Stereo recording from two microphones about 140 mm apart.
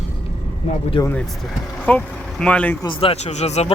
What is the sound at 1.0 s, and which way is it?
Speech, 35° left (ahead or behind).